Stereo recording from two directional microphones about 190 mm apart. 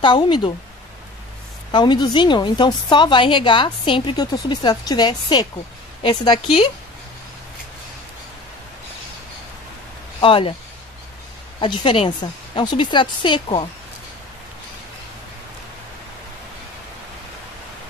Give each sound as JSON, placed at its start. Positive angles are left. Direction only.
{"t": 0.0, "sound": "a woman's voice", "side_deg": 25}
{"t": 1.7, "sound": "a woman's voice", "side_deg": 25}
{"t": 10.2, "sound": "a woman's voice", "side_deg": 25}
{"t": 11.6, "sound": "a woman's voice", "side_deg": 25}